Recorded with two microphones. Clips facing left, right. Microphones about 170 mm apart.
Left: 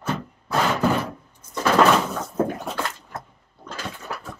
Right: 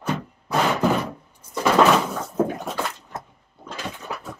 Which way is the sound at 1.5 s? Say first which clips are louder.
Right 1 dB; centre (ahead or behind).